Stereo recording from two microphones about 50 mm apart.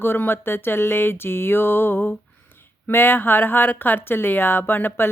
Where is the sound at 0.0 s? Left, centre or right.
Left.